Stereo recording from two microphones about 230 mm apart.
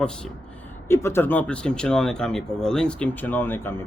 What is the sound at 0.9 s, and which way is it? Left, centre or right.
Speech, centre.